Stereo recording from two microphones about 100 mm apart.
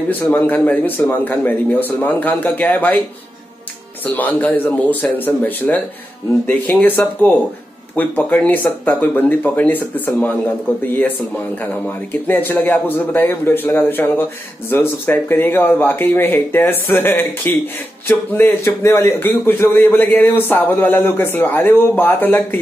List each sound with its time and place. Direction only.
0.1 s speech: 20° left (ahead or behind)
4.0 s speech: 15° left (ahead or behind)